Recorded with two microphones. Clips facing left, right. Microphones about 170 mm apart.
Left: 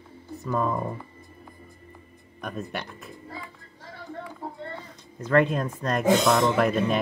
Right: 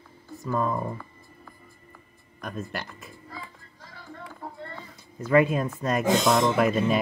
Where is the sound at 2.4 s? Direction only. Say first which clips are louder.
Left 1 dB; centre (ahead or behind).